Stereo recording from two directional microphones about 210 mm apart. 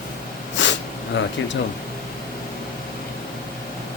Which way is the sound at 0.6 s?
60° left (ahead or behind).